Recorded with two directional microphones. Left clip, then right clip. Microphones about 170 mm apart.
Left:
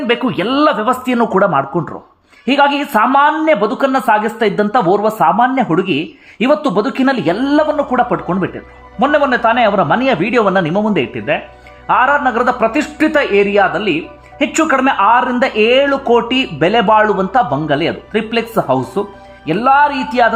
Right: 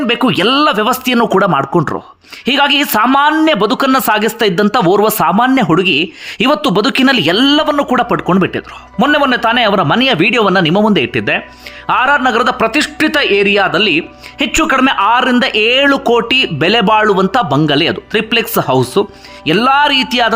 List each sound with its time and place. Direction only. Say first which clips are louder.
0.1 s speech: right 3 dB; 20° right (ahead or behind)